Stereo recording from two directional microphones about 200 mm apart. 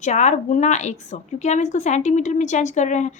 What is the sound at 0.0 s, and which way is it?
A woman's voice, 35° left (ahead or behind).